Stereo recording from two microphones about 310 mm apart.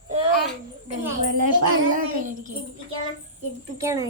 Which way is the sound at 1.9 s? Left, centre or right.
Right.